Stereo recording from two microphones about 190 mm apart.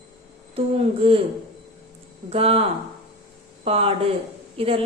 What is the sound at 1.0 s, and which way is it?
Speech, 30° right (ahead or behind).